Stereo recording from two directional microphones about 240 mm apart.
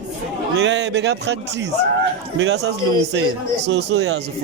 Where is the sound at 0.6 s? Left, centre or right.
Right.